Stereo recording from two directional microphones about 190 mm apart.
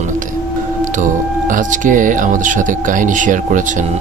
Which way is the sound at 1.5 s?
45° right (ahead or behind).